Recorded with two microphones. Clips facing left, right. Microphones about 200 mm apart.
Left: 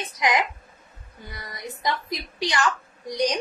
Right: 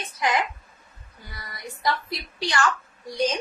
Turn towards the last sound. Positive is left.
turn(degrees=15)  # may be behind; listen again after turning